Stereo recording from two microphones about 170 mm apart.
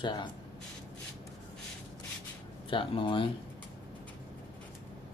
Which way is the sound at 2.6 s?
30° left (ahead or behind).